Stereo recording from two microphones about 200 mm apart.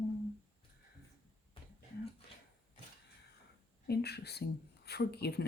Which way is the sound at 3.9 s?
55° left (ahead or behind).